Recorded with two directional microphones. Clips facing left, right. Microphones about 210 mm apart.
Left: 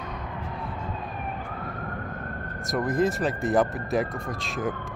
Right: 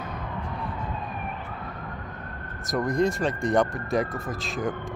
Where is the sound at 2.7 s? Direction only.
Centre (ahead or behind).